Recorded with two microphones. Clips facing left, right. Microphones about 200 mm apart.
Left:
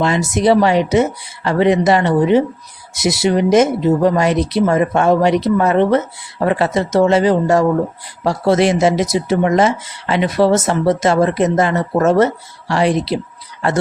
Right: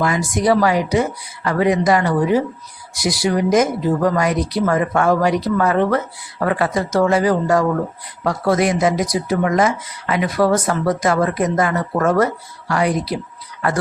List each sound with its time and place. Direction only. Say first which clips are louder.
0.0 s speech: left 3 dB; 25° left (ahead or behind)